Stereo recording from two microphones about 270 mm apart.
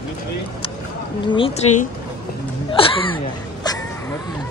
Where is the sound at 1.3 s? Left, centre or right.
Left.